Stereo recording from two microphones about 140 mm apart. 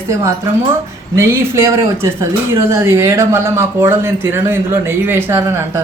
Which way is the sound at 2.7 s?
20° right (ahead or behind).